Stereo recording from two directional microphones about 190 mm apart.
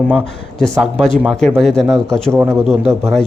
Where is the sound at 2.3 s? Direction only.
15° right (ahead or behind).